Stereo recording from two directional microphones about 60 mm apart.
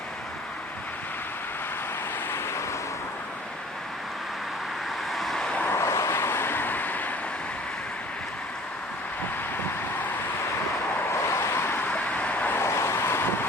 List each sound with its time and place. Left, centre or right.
5.1 s vehicle: centre
5.7 s vehicle: left
11.1 s vehicle: left
12.5 s wind: left